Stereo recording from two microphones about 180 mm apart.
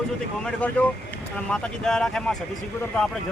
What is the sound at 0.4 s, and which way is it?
Speech, 5° left (ahead or behind).